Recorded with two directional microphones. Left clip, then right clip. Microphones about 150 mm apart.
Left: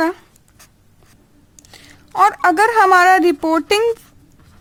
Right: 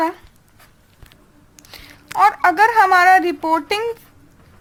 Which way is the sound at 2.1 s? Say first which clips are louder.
Left 1 dB; 45° left (ahead or behind).